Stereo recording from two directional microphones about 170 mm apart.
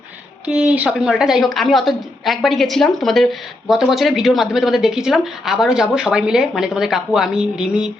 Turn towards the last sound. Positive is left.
turn(degrees=-5)  # may be behind; listen again after turning